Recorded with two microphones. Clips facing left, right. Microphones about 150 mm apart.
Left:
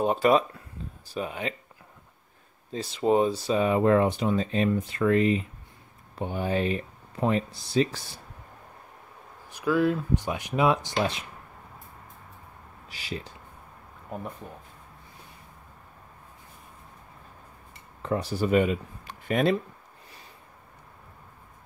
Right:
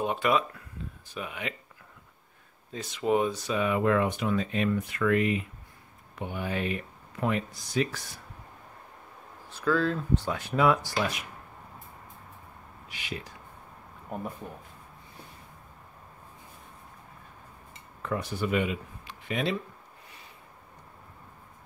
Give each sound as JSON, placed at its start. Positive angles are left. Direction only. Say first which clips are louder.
{"t": 0.0, "sound": "speech", "louder": "left 5 dB", "side_deg": 35}
{"t": 2.7, "sound": "speech", "louder": "left 3 dB", "side_deg": 30}
{"t": 9.5, "sound": "speech", "louder": "left 3 dB", "side_deg": 15}
{"t": 12.8, "sound": "speech", "louder": "left 2 dB", "side_deg": 35}
{"t": 18.0, "sound": "speech", "louder": "left 4 dB", "side_deg": 30}